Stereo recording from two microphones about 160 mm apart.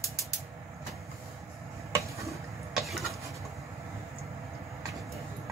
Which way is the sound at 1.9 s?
20° right (ahead or behind).